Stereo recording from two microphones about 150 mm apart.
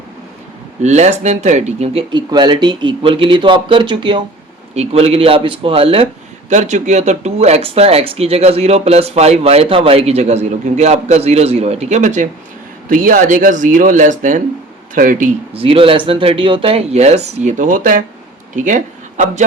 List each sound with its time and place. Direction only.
0.8 s speech: 50° right (ahead or behind); by 4.2 s 30° right (ahead or behind)
4.7 s speech: 45° right (ahead or behind)
6.5 s speech: 50° right (ahead or behind)
12.9 s speech: 65° right (ahead or behind)
15.5 s speech: 40° right (ahead or behind); by 19.5 s 55° right (ahead or behind)